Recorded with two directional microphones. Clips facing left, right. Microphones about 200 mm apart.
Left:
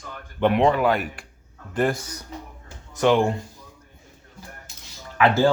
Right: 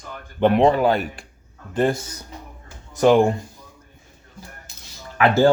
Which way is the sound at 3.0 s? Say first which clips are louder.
Right 4 dB; 40° right (ahead or behind).